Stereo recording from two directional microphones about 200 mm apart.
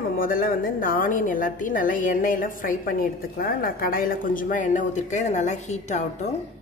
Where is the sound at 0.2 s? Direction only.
45° left (ahead or behind).